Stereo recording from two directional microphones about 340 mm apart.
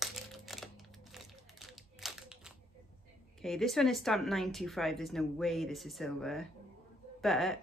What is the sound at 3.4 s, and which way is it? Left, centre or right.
Speech, centre.